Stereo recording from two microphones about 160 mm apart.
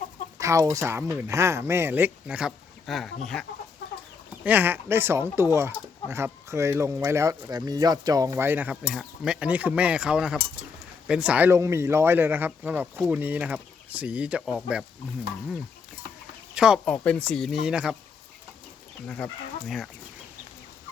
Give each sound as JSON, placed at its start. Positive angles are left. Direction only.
{"t": 0.3, "sound": "speech", "side_deg": -20}
{"t": 3.3, "sound": "cutlery", "side_deg": 5}
{"t": 4.4, "sound": "speech", "side_deg": -10}
{"t": 8.9, "sound": "cutlery", "side_deg": -5}
{"t": 11.1, "sound": "speech", "side_deg": -5}
{"t": 16.6, "sound": "speech", "side_deg": -5}
{"t": 16.8, "sound": "cutlery", "side_deg": 10}
{"t": 19.0, "sound": "cutlery", "side_deg": 5}